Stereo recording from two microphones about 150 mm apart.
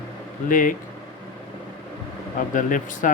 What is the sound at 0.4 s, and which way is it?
Speech, 65° left (ahead or behind).